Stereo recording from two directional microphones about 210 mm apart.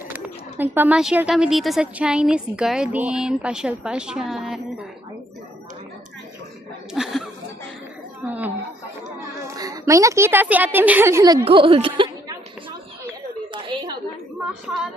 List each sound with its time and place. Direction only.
0.6 s a woman's voice: 10° right (ahead or behind)
6.9 s chuckle: centre (ahead or behind)
8.3 s chatter: 5° right (ahead or behind)
9.6 s a woman's voice: 15° right (ahead or behind)
13.5 s a sound: 25° right (ahead or behind)